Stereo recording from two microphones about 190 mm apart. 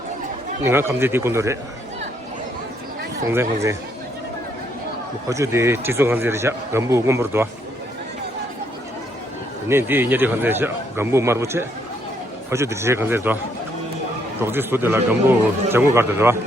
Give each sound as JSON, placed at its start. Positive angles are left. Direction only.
{"t": 0.6, "sound": "speech", "side_deg": -15}
{"t": 3.2, "sound": "speech", "side_deg": -15}
{"t": 5.3, "sound": "speech", "side_deg": -15}
{"t": 9.6, "sound": "speech", "side_deg": -10}
{"t": 14.4, "sound": "speech", "side_deg": -10}